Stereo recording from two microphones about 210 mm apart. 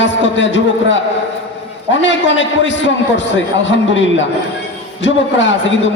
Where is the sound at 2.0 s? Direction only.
60° left (ahead or behind).